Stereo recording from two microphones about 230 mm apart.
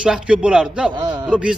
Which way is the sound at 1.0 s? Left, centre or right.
Centre.